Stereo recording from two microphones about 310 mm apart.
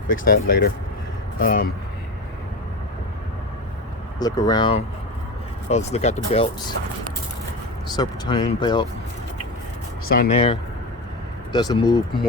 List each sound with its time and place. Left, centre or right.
0.1 s speech: left
4.2 s speech: centre
7.9 s speech: centre
10.1 s speech: left